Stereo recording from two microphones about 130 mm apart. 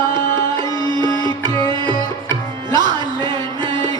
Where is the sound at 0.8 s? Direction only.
35° right (ahead or behind).